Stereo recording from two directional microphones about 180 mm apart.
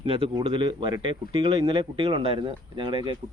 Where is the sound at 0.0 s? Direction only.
30° right (ahead or behind).